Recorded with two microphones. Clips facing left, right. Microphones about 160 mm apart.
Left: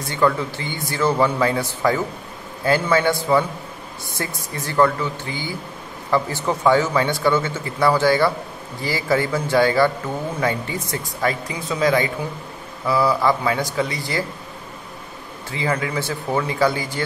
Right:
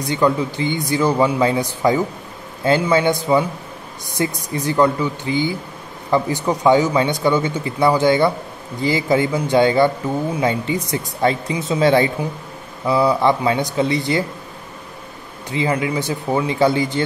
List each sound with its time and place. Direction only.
0.0 s speech: 15° right (ahead or behind)
15.5 s speech: 20° right (ahead or behind)